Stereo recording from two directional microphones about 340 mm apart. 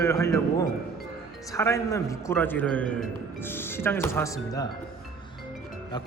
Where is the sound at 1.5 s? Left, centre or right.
Centre.